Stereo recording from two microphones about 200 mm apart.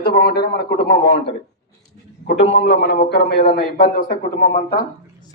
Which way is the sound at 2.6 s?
50° left (ahead or behind).